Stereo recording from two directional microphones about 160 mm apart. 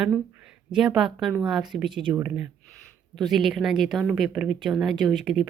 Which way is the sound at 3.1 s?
Centre (ahead or behind).